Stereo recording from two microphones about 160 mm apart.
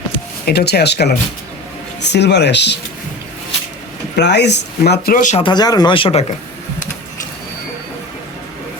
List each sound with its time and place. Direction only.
0.4 s speech: 90° left
4.1 s speech: 90° left; by 5.4 s 55° left (ahead or behind)
5.4 s speech: 25° left (ahead or behind)